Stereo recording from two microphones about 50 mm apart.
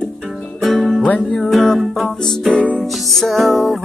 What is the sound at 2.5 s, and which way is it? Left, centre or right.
Music, left.